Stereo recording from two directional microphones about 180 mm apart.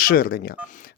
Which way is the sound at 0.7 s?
50° left (ahead or behind).